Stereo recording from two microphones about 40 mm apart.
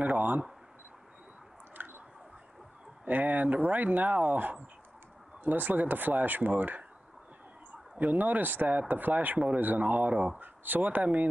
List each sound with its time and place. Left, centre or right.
0.0 s camera: right
1.8 s chewing: right
3.1 s speech: right
8.0 s speech: right
10.4 s speech: right